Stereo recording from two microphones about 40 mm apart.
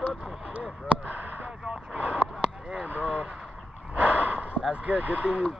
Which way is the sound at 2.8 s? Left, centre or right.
Right.